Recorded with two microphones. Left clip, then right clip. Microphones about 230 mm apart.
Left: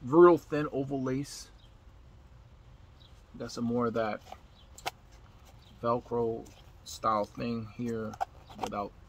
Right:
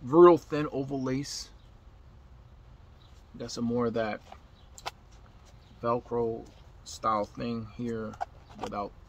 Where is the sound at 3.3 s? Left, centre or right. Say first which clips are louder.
Right 1 dB; centre.